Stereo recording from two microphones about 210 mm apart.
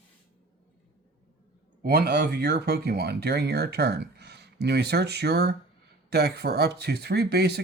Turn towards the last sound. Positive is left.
turn(degrees=-50)  # may be behind; listen again after turning